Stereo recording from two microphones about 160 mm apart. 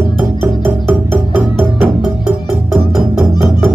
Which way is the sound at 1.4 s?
5° right (ahead or behind).